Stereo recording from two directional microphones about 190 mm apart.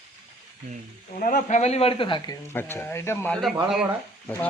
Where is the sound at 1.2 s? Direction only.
45° left (ahead or behind); by 3.3 s 15° left (ahead or behind).